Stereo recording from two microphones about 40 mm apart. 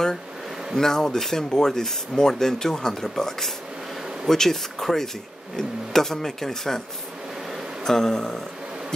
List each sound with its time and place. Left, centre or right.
0.7 s speech: centre
7.8 s speech: centre